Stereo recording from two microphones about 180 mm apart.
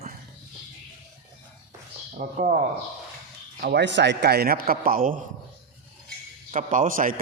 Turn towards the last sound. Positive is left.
turn(degrees=-50)  # may be behind; listen again after turning